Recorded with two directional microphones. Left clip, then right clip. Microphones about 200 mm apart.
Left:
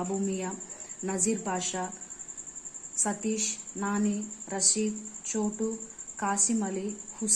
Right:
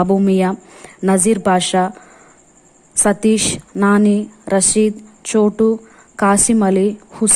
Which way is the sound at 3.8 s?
50° right (ahead or behind).